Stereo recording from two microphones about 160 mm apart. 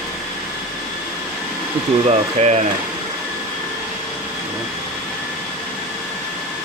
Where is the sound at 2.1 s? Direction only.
45° right (ahead or behind).